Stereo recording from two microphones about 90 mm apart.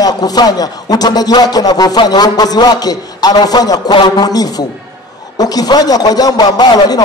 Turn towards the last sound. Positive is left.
turn(degrees=50)  # may be behind; listen again after turning